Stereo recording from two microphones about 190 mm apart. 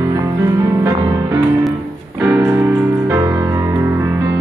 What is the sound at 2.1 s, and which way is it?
Music, 10° right (ahead or behind).